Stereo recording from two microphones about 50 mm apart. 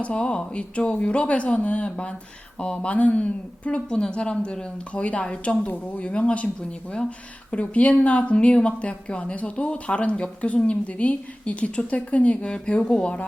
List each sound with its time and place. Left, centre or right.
0.0 s speech: left